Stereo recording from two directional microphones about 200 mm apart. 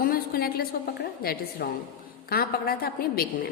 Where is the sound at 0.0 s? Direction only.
50° left (ahead or behind).